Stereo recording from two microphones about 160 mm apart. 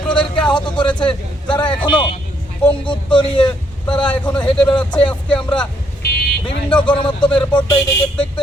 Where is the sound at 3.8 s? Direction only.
5° left (ahead or behind).